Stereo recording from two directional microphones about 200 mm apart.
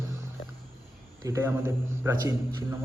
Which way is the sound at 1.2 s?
15° right (ahead or behind).